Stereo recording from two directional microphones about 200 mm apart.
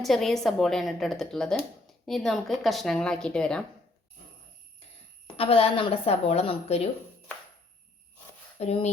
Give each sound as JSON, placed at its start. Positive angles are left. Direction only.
{"t": 0.0, "sound": "speech", "side_deg": 0}
{"t": 5.4, "sound": "a woman's voice", "side_deg": 30}
{"t": 8.5, "sound": "speech", "side_deg": 30}